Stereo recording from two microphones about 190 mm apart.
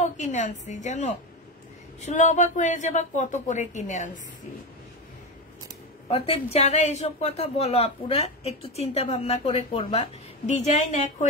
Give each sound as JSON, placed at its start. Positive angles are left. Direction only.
{"t": 0.0, "sound": "speech", "side_deg": 40}
{"t": 6.0, "sound": "speech", "side_deg": 30}